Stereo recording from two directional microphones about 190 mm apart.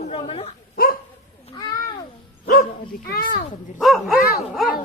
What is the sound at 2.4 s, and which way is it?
Dog, 50° left (ahead or behind).